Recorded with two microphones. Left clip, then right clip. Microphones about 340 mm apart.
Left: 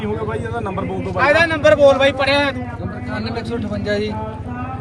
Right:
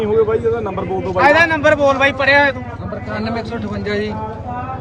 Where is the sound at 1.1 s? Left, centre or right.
Centre.